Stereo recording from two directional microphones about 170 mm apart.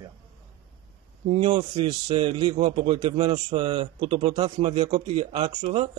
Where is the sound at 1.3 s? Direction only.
35° right (ahead or behind).